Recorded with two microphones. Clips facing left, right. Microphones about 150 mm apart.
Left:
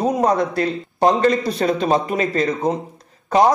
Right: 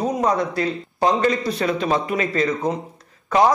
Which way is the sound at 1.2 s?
35° left (ahead or behind).